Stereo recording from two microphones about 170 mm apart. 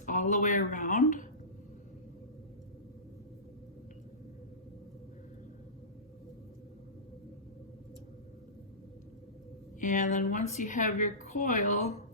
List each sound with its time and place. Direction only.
0.0 s a woman's voice: 45° left (ahead or behind)
9.8 s a woman's voice: 50° left (ahead or behind)